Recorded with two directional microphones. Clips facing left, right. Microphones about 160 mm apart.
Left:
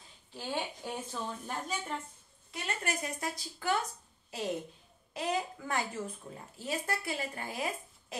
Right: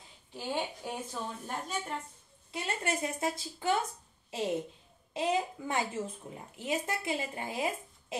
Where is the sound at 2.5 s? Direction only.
25° right (ahead or behind).